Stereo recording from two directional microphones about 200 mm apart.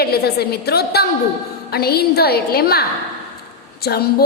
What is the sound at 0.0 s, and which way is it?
A woman's voice, 50° left (ahead or behind).